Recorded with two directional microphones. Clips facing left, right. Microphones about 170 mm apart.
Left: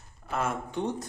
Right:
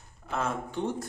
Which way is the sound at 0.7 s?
20° left (ahead or behind).